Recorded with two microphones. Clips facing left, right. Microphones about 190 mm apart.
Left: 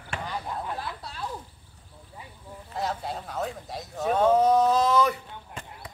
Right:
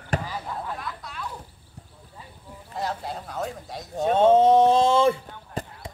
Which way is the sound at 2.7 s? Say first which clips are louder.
Even; centre (ahead or behind).